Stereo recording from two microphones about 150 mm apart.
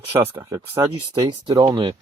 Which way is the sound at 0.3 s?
25° right (ahead or behind).